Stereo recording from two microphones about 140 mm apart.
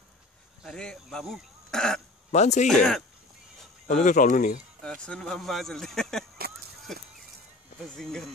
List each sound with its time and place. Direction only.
0.6 s speech: 5° left (ahead or behind)
2.3 s speech: 55° left (ahead or behind)
2.7 s speech: 5° left (ahead or behind)
3.8 s speech: 70° left (ahead or behind)
4.8 s speech: 5° left (ahead or behind)